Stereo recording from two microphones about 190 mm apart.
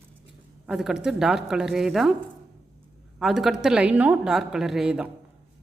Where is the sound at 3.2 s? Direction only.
Centre (ahead or behind).